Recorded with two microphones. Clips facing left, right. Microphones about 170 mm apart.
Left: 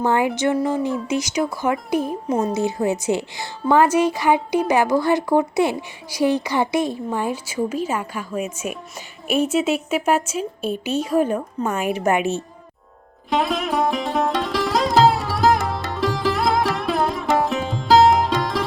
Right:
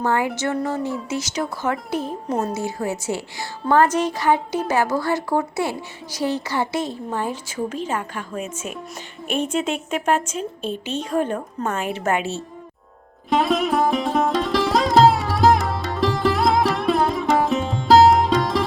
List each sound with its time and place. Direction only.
0.0 s a woman's voice: 20° left (ahead or behind); by 2.5 s centre (ahead or behind)
2.5 s a woman's voice: 20° left (ahead or behind)
13.3 s sitar: centre (ahead or behind)